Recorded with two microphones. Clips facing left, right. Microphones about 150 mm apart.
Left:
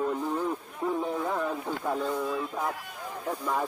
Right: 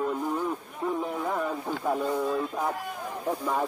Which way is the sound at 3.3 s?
15° right (ahead or behind).